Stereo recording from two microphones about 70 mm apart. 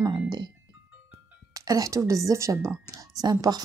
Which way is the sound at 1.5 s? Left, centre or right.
Right.